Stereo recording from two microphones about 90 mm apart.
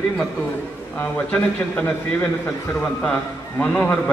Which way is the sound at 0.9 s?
20° left (ahead or behind).